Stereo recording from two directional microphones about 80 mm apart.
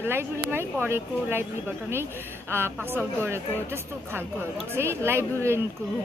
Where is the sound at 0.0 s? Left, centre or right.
Right.